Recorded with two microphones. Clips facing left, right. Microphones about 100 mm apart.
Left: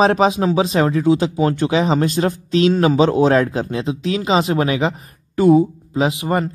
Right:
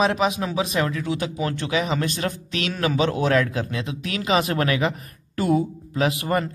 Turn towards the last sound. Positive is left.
turn(degrees=25)  # may be behind; listen again after turning